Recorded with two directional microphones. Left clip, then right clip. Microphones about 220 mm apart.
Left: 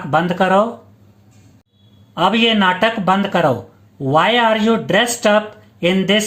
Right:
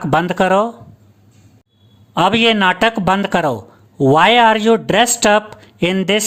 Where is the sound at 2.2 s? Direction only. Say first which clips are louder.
Right 2 dB; 40° right (ahead or behind).